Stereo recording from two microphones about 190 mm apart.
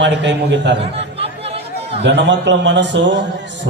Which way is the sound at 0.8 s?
30° right (ahead or behind).